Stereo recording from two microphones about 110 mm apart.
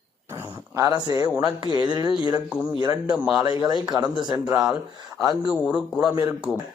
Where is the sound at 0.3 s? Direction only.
20° right (ahead or behind); by 1.3 s 35° right (ahead or behind).